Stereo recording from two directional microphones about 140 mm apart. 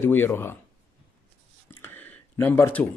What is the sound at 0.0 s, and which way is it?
Speech, 15° left (ahead or behind).